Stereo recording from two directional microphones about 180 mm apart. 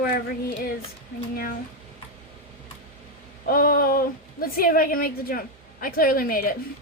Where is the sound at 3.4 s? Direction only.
55° left (ahead or behind).